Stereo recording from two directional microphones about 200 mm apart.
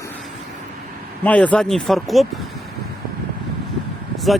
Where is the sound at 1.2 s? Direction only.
5° left (ahead or behind).